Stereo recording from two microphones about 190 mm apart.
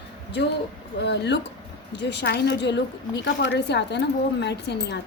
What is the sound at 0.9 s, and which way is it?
Speech, 65° left (ahead or behind).